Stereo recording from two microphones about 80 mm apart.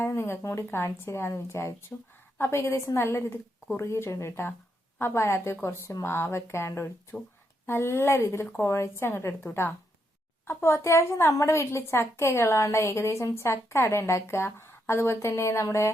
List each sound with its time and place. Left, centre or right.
0.0 s a woman's voice: left
1.9 s a woman's voice: centre
2.4 s a woman's voice: left